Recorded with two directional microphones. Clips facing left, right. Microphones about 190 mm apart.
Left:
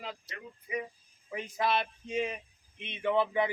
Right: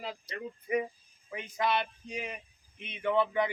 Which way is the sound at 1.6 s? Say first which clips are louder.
Even; 5° left (ahead or behind).